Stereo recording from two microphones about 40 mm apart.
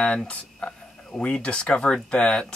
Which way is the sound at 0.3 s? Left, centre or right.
Left.